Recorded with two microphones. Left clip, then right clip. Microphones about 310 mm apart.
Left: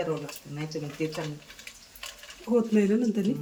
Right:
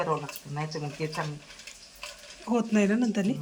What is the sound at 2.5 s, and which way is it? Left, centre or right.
Speech, centre.